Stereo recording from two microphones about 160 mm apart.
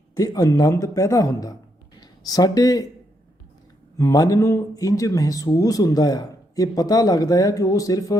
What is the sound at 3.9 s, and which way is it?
Speech, 20° left (ahead or behind).